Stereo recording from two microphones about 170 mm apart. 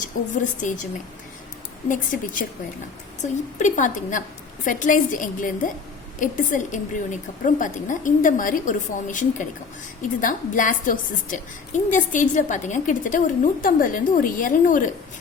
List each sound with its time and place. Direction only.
0.1 s a woman's voice: 50° left (ahead or behind)
1.9 s a woman's voice: 50° left (ahead or behind)
3.6 s a woman's voice: 45° left (ahead or behind)